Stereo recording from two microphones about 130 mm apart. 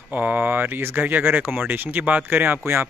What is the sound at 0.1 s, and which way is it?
Speech, 10° right (ahead or behind).